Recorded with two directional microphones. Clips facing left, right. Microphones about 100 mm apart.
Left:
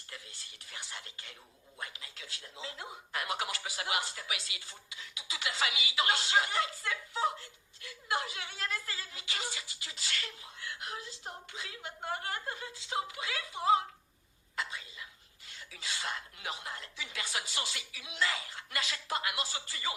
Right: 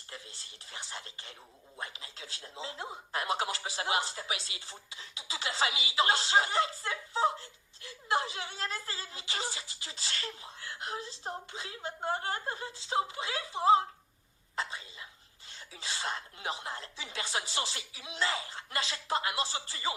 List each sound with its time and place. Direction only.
0.1 s speech: 30° right (ahead or behind)
14.5 s whispering: 30° right (ahead or behind)
15.4 s speech: 30° right (ahead or behind)